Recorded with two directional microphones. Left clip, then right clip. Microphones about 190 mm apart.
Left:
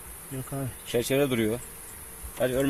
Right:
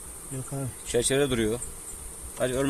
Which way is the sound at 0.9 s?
10° left (ahead or behind).